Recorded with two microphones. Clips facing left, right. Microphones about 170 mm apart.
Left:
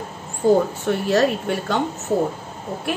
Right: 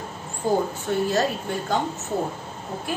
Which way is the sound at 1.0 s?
70° left (ahead or behind).